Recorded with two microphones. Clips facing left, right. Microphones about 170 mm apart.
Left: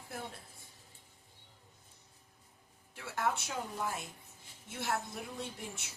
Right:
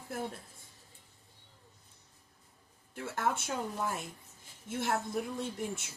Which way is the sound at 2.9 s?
50° right (ahead or behind).